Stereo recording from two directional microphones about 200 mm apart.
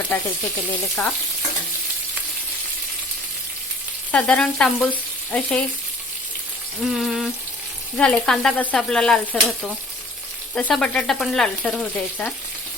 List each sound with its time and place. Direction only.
0.1 s sizzle: 10° left (ahead or behind)
1.0 s frying: 5° left (ahead or behind)
4.1 s frying: 5° left (ahead or behind)
6.8 s frying: centre (ahead or behind)